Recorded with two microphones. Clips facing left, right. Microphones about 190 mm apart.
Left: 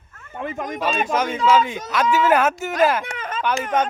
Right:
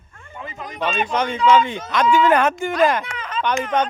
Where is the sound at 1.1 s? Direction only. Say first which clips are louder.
Right 2 dB; 5° left (ahead or behind).